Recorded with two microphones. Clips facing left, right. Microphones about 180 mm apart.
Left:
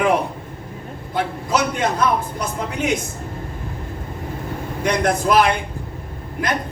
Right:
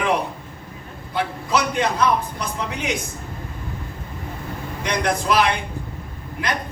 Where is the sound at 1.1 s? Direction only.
45° left (ahead or behind).